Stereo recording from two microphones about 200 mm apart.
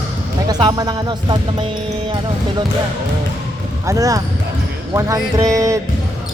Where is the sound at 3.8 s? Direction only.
15° right (ahead or behind).